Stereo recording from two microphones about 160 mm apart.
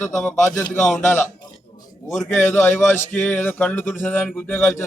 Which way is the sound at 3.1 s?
10° left (ahead or behind).